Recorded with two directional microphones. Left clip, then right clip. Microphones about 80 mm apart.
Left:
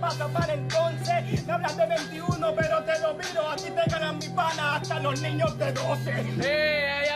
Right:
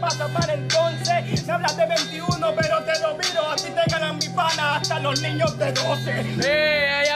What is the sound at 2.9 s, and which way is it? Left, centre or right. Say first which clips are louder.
Speech: right 3 dB; centre.